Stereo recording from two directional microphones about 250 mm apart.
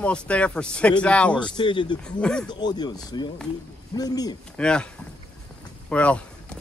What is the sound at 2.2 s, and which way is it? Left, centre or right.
Speech, centre.